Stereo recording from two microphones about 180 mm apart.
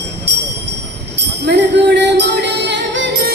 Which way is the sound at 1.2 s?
70° right (ahead or behind).